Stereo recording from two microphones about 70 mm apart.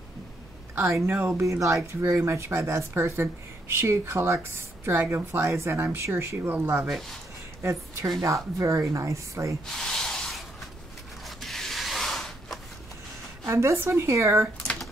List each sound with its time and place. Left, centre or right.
0.7 s a woman's voice: right
5.8 s speech: right
6.9 s speech: centre
7.6 s a woman's voice: right
9.7 s spray: centre
11.2 s a sound: centre
13.5 s a woman's voice: right